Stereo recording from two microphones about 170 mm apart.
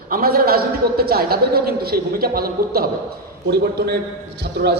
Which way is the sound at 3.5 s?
75° right (ahead or behind).